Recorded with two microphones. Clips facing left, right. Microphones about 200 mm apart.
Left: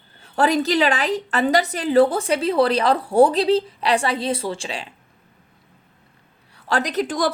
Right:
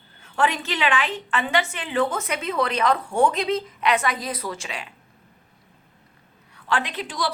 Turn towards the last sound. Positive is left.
turn(degrees=45)  # may be behind; listen again after turning